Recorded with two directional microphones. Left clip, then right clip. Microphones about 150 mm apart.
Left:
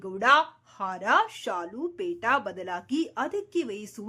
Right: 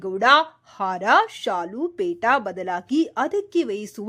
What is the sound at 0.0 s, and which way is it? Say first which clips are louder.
A woman's voice: right 5 dB; 30° right (ahead or behind).